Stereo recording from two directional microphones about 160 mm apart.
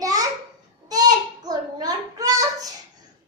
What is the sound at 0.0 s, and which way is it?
Babbling, 20° right (ahead or behind).